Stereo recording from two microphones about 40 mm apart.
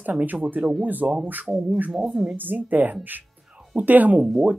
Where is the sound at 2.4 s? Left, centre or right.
Right.